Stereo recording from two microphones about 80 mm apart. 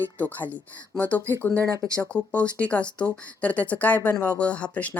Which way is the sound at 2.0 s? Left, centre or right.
Centre.